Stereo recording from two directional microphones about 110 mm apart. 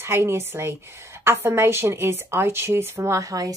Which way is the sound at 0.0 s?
20° right (ahead or behind).